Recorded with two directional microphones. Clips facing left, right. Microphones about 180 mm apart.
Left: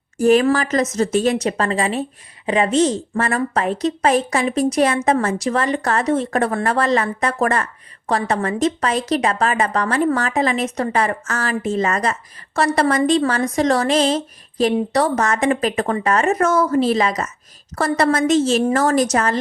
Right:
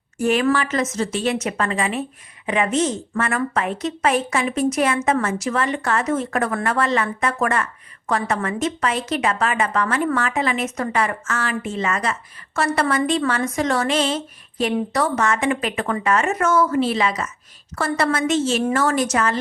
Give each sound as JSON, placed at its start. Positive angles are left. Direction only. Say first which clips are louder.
{"t": 0.2, "sound": "speech", "louder": "left 4 dB", "side_deg": 40}